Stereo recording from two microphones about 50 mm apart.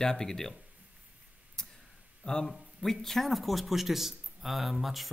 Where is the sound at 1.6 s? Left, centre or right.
Centre.